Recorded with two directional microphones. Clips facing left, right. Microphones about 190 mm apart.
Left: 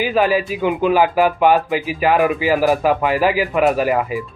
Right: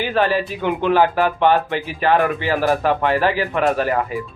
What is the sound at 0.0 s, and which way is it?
Speech, 5° left (ahead or behind).